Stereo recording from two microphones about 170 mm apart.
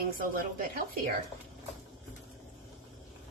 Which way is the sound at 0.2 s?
55° right (ahead or behind).